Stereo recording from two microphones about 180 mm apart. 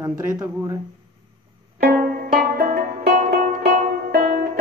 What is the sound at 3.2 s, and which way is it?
Music, 45° right (ahead or behind).